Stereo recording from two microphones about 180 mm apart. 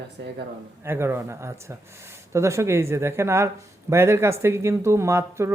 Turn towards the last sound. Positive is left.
turn(degrees=-15)  # may be behind; listen again after turning